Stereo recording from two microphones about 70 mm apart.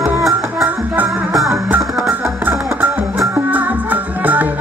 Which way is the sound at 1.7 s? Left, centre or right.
Right.